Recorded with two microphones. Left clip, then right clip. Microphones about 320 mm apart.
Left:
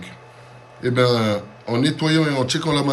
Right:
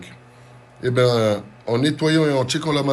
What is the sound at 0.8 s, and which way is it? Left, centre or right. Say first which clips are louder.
Speech: right 1 dB; centre.